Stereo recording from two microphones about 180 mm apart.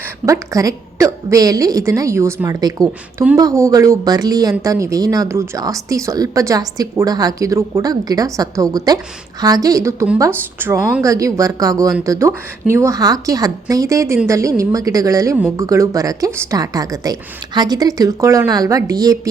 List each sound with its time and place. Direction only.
0.3 s a woman's voice: 20° right (ahead or behind)